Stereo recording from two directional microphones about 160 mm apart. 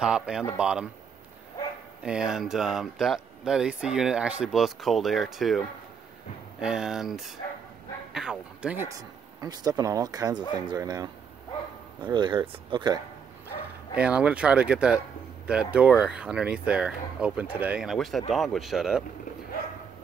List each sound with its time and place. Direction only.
0.0 s speech: 5° right (ahead or behind)
2.0 s speech: 5° right (ahead or behind)
6.6 s speech: 5° right (ahead or behind)
9.4 s speech: 25° right (ahead or behind)
13.9 s speech: 5° right (ahead or behind)